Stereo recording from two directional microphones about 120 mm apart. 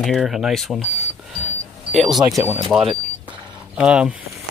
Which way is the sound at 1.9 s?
Centre (ahead or behind).